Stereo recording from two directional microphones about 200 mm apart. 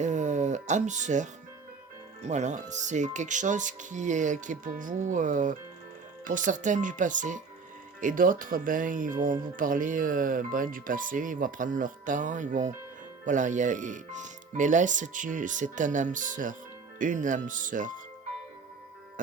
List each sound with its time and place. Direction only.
0.0 s music: 35° right (ahead or behind)
2.2 s speech: 35° right (ahead or behind)